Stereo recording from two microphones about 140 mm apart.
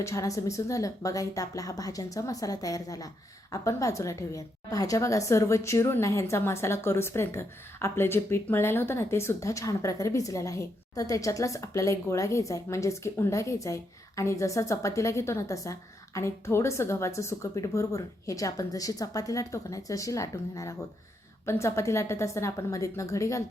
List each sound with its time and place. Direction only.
0.0 s a woman's voice: 20° left (ahead or behind)